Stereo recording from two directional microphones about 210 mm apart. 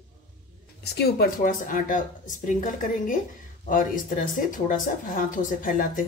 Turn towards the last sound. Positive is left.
turn(degrees=40)  # may be behind; listen again after turning